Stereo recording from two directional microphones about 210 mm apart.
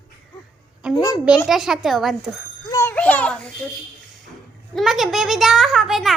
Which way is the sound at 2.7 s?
15° left (ahead or behind).